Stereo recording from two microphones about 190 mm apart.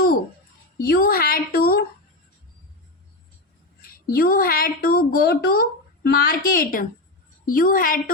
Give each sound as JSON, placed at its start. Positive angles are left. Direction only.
{"t": 0.8, "sound": "speech", "side_deg": 50}
{"t": 4.1, "sound": "speech", "side_deg": 50}